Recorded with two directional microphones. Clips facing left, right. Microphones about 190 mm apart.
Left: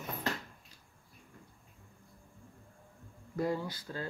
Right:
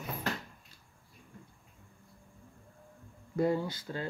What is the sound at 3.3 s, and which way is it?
Speech, 25° right (ahead or behind).